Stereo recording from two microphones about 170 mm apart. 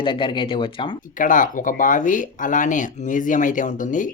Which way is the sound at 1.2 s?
50° left (ahead or behind).